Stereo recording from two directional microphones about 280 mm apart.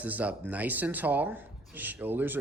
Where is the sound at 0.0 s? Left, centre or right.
Centre.